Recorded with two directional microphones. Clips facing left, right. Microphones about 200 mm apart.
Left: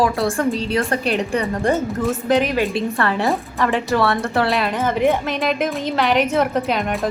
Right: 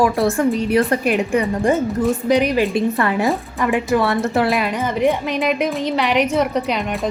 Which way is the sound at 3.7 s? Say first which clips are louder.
Right 2 dB; 15° right (ahead or behind).